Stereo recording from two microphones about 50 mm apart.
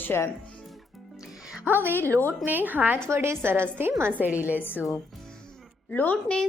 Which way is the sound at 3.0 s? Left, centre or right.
Right.